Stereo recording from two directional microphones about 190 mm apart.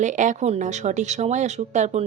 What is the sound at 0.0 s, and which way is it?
Speech, 40° right (ahead or behind).